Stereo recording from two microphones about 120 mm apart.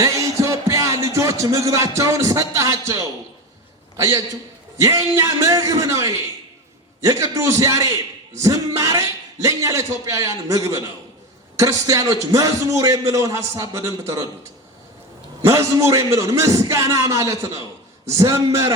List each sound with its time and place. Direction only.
0.0 s music: 25° right (ahead or behind)
3.9 s a man's voice: 25° right (ahead or behind)
15.4 s speech: 20° right (ahead or behind)